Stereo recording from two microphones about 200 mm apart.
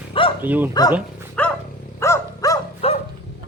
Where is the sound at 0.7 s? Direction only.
20° left (ahead or behind).